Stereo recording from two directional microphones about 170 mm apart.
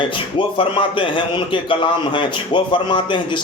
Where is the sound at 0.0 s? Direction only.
30° left (ahead or behind).